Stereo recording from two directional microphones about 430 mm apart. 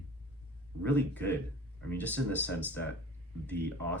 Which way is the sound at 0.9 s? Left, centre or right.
Centre.